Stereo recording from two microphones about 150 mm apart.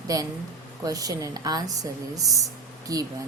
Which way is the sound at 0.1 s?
25° right (ahead or behind).